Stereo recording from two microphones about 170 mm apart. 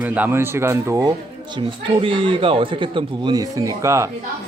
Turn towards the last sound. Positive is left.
turn(degrees=-20)  # may be behind; listen again after turning